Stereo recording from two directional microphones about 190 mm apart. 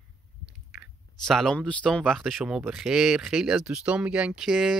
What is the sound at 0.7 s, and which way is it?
Speech, centre (ahead or behind).